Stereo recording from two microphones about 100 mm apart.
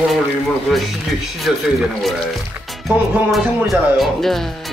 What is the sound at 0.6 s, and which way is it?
Speech, centre (ahead or behind).